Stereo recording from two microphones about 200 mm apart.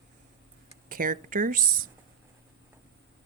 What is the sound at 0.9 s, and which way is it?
Speech, 45° right (ahead or behind).